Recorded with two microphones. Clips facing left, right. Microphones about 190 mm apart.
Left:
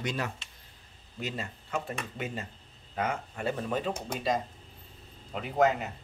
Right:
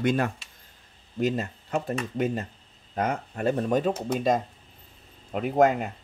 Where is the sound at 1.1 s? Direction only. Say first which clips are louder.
Right 10 dB; 40° right (ahead or behind).